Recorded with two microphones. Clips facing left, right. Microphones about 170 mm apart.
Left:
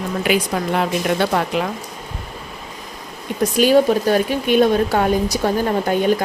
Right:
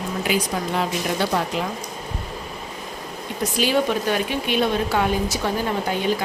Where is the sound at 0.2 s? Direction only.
65° left (ahead or behind).